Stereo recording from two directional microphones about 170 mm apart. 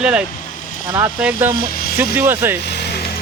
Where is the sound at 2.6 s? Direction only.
75° left (ahead or behind).